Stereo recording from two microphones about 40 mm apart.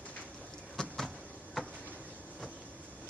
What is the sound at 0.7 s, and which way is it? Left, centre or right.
Vehicle, centre.